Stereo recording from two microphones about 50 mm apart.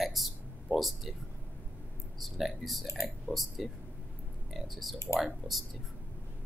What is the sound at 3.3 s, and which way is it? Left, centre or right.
Speech, left.